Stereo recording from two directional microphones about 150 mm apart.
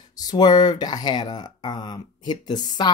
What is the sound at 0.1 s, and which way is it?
Speech, 25° left (ahead or behind).